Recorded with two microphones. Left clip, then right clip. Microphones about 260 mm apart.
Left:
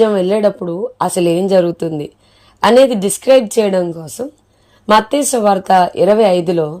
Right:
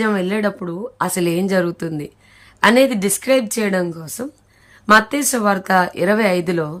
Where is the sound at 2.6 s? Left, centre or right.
Centre.